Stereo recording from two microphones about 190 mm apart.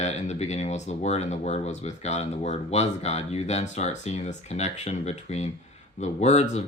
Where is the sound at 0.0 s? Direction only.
35° left (ahead or behind).